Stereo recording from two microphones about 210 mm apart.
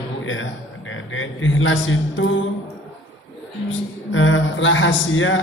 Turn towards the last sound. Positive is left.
turn(degrees=65)  # may be behind; listen again after turning